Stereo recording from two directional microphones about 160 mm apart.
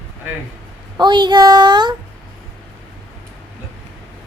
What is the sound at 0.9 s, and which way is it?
A woman's voice, 25° right (ahead or behind).